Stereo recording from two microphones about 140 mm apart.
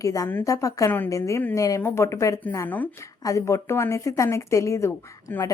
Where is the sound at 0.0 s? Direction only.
25° left (ahead or behind).